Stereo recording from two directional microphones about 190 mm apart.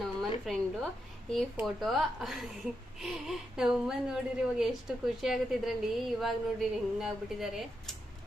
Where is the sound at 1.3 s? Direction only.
Centre (ahead or behind).